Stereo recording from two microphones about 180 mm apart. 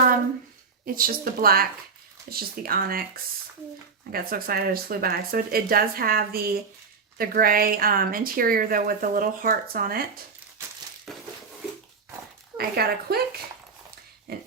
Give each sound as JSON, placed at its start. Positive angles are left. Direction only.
{"t": 0.9, "sound": "speech", "side_deg": -55}
{"t": 4.1, "sound": "a woman's voice", "side_deg": -55}
{"t": 11.1, "sound": "a sound", "side_deg": 0}
{"t": 12.5, "sound": "speech", "side_deg": -60}